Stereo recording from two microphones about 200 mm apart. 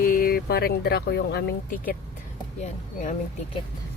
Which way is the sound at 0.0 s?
45° left (ahead or behind).